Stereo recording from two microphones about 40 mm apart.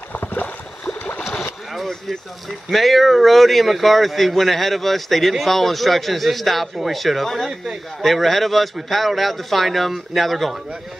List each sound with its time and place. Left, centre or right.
0.2 s boat: left
0.8 s boat: left
2.7 s speech: centre